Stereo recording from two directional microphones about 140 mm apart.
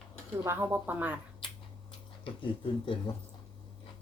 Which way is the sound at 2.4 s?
35° left (ahead or behind).